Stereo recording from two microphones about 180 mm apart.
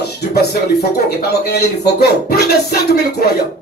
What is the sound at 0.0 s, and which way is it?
A man's voice, 65° left (ahead or behind).